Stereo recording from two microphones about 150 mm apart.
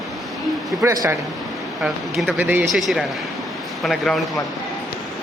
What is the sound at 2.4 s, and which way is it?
Speech, 10° right (ahead or behind).